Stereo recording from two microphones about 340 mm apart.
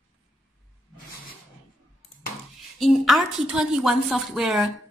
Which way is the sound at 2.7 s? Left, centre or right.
Centre.